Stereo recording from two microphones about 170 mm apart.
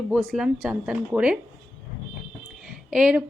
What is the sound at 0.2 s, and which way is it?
Speech, centre (ahead or behind).